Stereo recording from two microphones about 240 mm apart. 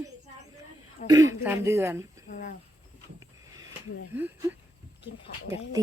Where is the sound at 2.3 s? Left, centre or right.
Left.